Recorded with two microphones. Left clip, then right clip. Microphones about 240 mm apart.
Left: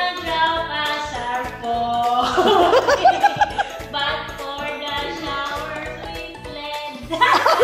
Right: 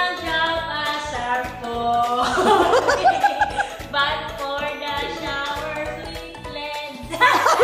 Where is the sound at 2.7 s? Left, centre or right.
Centre.